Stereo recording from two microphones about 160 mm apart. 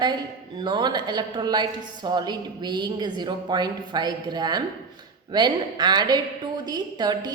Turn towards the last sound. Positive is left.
turn(degrees=-25)  # may be behind; listen again after turning